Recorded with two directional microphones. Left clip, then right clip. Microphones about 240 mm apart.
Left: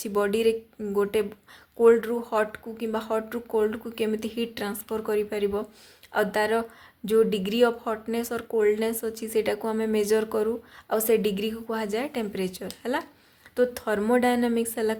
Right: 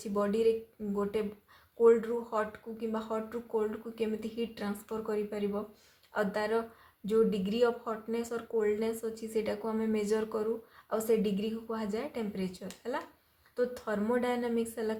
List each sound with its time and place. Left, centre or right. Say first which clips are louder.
0.0 s a woman's voice: left 6 dB; left
1.8 s a woman's voice: left 6 dB; left